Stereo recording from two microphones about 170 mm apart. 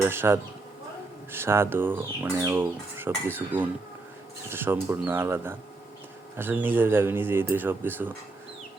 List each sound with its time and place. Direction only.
0.1 s speech: 15° right (ahead or behind)